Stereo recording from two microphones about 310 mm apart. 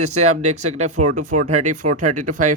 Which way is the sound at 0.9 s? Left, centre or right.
Right.